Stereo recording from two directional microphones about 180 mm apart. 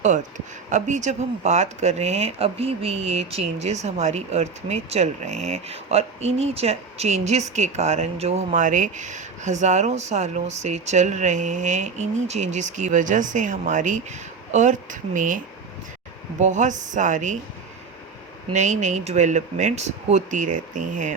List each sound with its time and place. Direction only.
0.0 s speech: 45° right (ahead or behind)
16.4 s speech: 40° right (ahead or behind)
18.5 s speech: 40° right (ahead or behind)